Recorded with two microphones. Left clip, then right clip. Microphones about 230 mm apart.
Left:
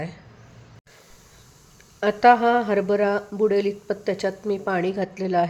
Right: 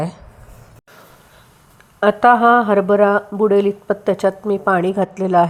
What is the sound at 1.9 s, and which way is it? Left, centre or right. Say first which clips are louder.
Speech: right 4 dB; centre.